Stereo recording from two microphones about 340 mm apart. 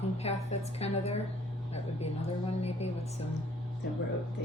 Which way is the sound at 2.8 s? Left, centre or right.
Centre.